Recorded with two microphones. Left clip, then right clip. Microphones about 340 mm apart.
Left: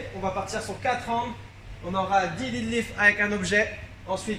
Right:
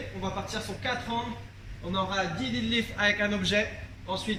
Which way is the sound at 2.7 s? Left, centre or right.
Centre.